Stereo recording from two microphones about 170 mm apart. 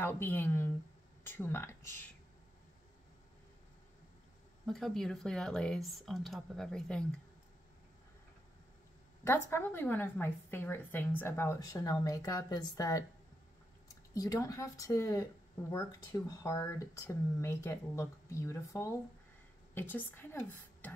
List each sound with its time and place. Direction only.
0.0 s a woman's voice: 10° left (ahead or behind)
4.6 s speech: centre (ahead or behind)
9.2 s a woman's voice: 15° left (ahead or behind)
14.1 s a woman's voice: 20° left (ahead or behind)